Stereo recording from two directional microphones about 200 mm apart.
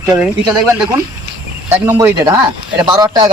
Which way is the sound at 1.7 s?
10° right (ahead or behind).